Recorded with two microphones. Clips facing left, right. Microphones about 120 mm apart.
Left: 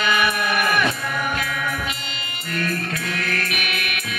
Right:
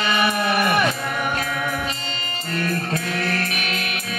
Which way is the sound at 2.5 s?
30° right (ahead or behind).